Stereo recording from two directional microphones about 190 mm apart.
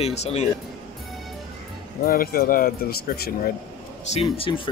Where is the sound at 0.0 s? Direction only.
35° left (ahead or behind).